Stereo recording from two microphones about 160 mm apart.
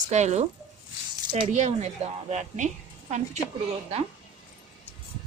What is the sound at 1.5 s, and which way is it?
Speech, 45° right (ahead or behind).